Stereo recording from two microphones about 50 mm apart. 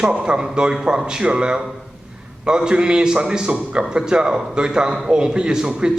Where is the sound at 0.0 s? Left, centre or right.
Centre.